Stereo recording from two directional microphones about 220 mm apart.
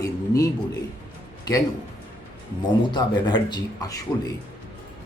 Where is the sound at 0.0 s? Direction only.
15° left (ahead or behind).